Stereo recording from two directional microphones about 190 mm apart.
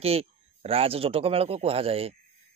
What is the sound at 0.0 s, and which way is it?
Speech, 30° right (ahead or behind).